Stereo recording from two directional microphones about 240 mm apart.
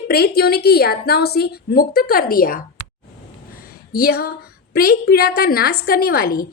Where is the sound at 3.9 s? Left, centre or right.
Left.